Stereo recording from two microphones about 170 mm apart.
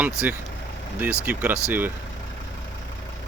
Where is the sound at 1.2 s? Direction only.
10° right (ahead or behind).